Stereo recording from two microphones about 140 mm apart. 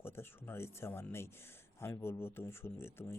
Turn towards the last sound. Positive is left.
turn(degrees=15)  # may be behind; listen again after turning